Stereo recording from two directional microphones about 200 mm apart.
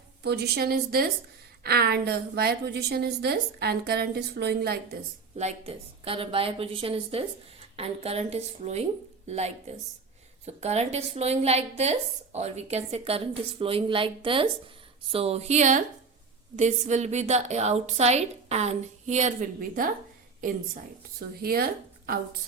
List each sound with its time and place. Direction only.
0.2 s a woman's voice: 55° right (ahead or behind)
5.4 s a woman's voice: 30° right (ahead or behind)
21.4 s a woman's voice: 50° right (ahead or behind)